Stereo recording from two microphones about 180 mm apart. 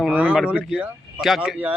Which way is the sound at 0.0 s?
5° right (ahead or behind).